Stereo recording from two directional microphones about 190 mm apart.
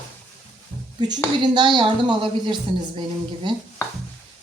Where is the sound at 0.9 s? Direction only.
20° right (ahead or behind).